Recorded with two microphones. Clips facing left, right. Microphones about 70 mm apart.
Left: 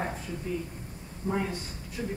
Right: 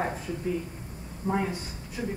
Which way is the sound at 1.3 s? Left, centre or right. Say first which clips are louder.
Right 2 dB; centre.